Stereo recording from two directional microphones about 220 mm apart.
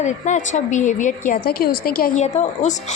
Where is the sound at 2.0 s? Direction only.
30° left (ahead or behind).